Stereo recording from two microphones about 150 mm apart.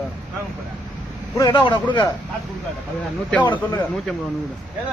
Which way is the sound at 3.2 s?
10° left (ahead or behind).